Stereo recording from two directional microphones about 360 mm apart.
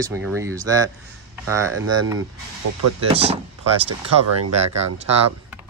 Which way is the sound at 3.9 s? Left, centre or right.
Right.